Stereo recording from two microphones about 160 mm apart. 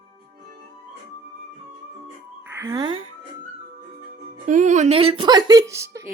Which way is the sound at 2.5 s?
20° right (ahead or behind).